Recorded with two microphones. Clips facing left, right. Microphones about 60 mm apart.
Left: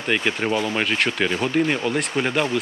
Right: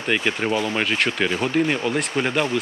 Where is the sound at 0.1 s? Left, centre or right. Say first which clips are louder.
Even; centre.